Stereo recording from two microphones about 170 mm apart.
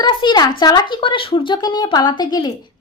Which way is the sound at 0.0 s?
30° left (ahead or behind).